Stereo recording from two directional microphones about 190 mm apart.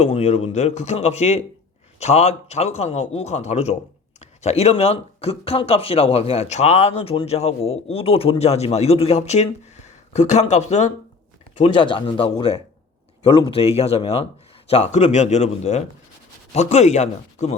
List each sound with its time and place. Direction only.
0.0 s speech: 35° left (ahead or behind)